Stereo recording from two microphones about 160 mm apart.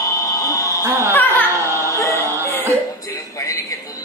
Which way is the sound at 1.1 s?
15° left (ahead or behind).